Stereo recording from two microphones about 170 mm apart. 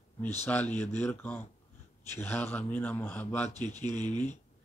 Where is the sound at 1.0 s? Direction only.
10° left (ahead or behind).